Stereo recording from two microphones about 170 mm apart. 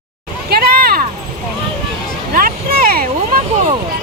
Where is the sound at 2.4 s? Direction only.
60° right (ahead or behind).